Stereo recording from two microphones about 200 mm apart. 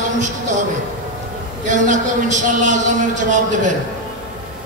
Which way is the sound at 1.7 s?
40° right (ahead or behind).